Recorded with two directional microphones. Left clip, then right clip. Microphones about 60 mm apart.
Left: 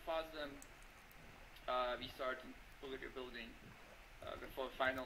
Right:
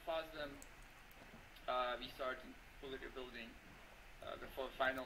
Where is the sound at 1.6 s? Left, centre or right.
Left.